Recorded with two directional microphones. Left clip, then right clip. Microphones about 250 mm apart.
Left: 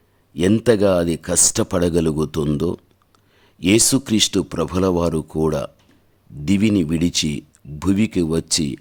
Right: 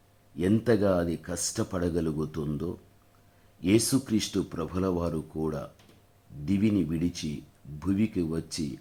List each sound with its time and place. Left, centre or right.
0.3 s speech: left